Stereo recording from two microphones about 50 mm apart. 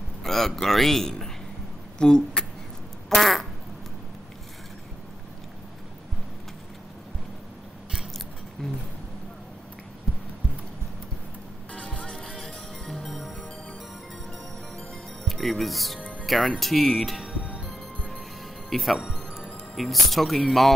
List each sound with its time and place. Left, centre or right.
0.2 s a man's voice: centre
3.2 s speech: centre
11.7 s music: left
12.4 s music: centre
15.2 s music: centre
16.0 s music: centre
16.3 s speech: centre
17.2 s music: centre
18.7 s speech: centre